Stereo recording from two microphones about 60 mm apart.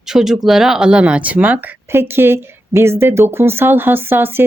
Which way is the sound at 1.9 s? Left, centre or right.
Right.